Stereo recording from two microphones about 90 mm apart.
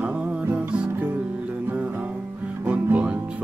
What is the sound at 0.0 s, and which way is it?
Music, 15° right (ahead or behind).